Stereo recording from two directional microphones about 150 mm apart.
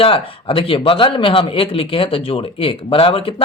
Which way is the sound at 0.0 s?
35° left (ahead or behind).